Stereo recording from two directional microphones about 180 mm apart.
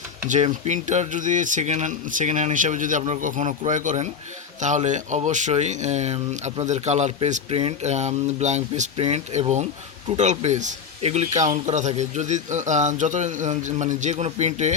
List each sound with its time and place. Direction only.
0.3 s speech: 40° right (ahead or behind)